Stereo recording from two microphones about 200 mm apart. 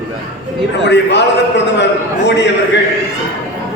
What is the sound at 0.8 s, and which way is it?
A man's voice, 60° left (ahead or behind).